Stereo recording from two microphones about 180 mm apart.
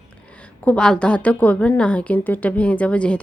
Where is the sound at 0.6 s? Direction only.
5° left (ahead or behind).